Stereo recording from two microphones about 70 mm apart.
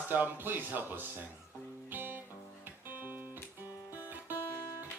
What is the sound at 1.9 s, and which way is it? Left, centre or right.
Music, right.